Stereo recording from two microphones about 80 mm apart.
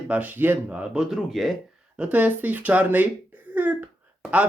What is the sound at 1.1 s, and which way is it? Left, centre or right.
Speech, centre.